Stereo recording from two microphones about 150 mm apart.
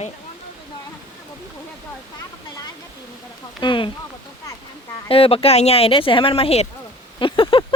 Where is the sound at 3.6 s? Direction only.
35° left (ahead or behind).